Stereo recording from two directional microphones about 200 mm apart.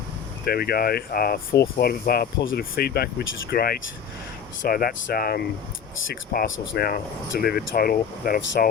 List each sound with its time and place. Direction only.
0.4 s speech: 50° left (ahead or behind)